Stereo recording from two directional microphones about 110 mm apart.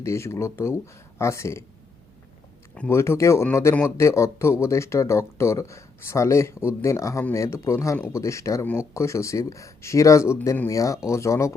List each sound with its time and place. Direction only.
0.0 s speech: 25° left (ahead or behind)
2.9 s speech: 25° left (ahead or behind)